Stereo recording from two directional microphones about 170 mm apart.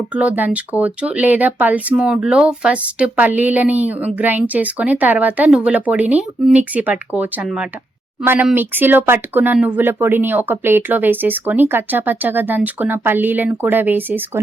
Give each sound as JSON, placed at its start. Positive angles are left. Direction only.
{"t": 0.1, "sound": "speech", "side_deg": -10}